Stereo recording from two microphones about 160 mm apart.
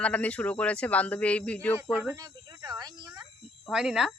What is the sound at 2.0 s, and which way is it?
Speech, 20° right (ahead or behind).